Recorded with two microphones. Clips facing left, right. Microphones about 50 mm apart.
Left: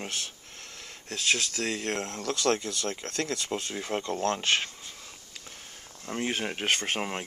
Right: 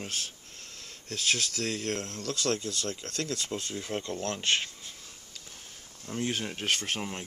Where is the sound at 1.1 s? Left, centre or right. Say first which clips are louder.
Left 2 dB; left.